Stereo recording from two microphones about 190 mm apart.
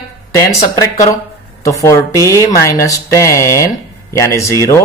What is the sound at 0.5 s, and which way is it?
Speech, 15° left (ahead or behind).